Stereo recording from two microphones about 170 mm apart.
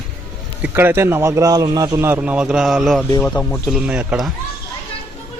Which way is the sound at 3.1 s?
10° left (ahead or behind).